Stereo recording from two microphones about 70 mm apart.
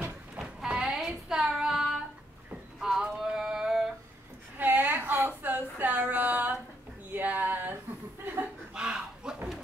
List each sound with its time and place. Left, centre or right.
0.4 s music: centre
1.5 s child singing: centre
2.8 s music: centre
4.6 s a sound: right
8.7 s chuckle: centre